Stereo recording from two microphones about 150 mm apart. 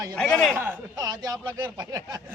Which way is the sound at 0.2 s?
5° left (ahead or behind).